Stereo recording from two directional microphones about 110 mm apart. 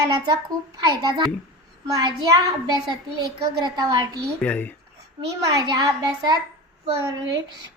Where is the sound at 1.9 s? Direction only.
35° right (ahead or behind).